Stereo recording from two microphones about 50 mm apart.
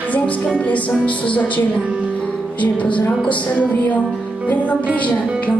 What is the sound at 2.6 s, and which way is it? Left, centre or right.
Music, left.